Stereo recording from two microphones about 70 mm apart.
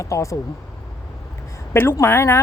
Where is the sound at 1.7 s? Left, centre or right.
Left.